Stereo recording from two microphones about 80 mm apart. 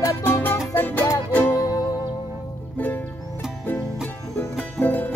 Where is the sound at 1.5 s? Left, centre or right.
Left.